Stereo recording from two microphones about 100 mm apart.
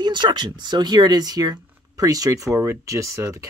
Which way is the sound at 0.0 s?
50° right (ahead or behind).